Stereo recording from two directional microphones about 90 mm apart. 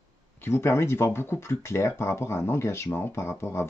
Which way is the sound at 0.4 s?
30° left (ahead or behind).